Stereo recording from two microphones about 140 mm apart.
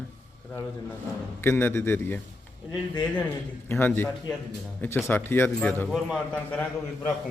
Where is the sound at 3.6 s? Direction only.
15° left (ahead or behind).